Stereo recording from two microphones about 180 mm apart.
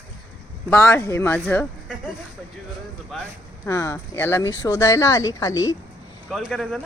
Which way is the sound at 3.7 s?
15° left (ahead or behind).